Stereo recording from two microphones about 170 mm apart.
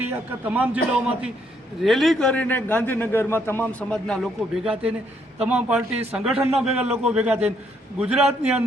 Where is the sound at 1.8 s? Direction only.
Centre (ahead or behind).